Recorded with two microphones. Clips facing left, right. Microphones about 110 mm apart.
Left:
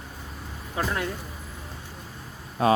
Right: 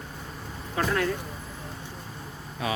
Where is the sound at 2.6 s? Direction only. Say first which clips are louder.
Left 9 dB; 35° left (ahead or behind).